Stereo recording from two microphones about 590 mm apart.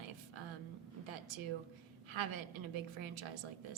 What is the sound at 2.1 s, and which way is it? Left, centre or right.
Speech, right.